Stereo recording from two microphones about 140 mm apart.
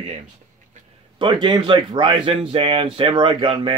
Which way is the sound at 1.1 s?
35° right (ahead or behind).